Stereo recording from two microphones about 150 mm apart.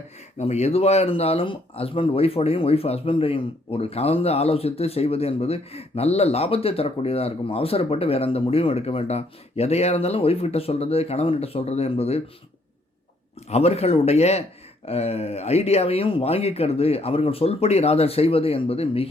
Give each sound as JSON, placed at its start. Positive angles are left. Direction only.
{"t": 0.3, "sound": "speech", "side_deg": 45}
{"t": 13.5, "sound": "speech", "side_deg": 45}